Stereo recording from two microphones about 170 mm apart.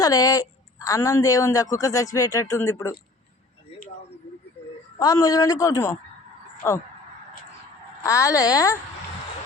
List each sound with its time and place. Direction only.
0.0 s speech: 20° left (ahead or behind)
4.9 s speech: 20° left (ahead or behind)
8.0 s speech: 20° left (ahead or behind)